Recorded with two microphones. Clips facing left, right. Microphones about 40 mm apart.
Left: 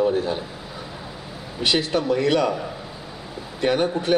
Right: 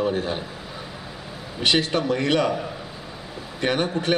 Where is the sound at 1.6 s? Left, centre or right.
Right.